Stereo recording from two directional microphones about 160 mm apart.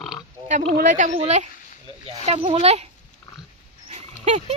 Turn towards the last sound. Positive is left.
turn(degrees=-45)  # may be behind; listen again after turning